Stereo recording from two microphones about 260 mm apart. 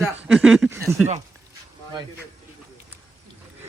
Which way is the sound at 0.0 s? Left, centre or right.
Centre.